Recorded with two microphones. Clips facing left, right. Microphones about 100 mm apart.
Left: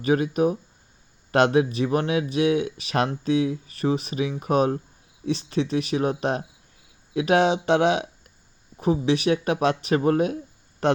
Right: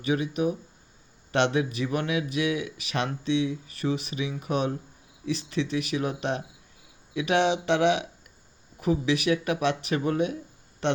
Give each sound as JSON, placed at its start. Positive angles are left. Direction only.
{"t": 0.0, "sound": "a man's voice", "side_deg": 45}